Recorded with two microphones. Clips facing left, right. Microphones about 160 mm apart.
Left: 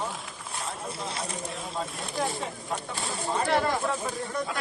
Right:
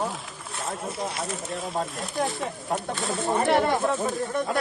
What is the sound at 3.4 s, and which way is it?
Speech, 25° right (ahead or behind).